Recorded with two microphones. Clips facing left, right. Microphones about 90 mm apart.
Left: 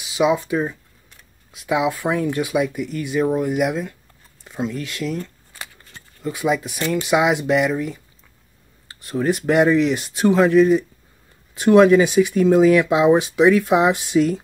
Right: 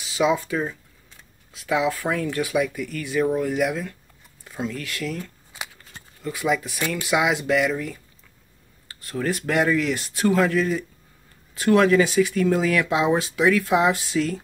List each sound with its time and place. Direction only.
0.0 s speech: 15° left (ahead or behind)
5.2 s scissors: 15° right (ahead or behind)
6.2 s speech: 20° left (ahead or behind)